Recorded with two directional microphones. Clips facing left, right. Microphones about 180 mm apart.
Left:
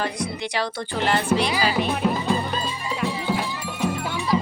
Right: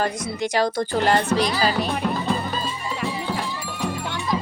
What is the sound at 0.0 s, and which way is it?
A woman's voice, 45° right (ahead or behind).